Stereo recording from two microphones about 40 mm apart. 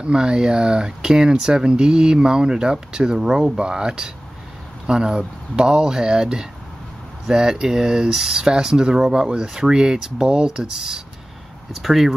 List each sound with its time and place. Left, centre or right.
0.0 s speech: centre
11.7 s speech: centre